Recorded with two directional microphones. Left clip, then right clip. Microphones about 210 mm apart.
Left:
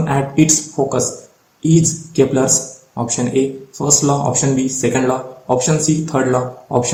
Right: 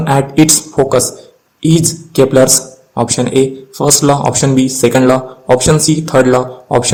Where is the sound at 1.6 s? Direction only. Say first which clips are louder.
Right 3 dB; 55° right (ahead or behind).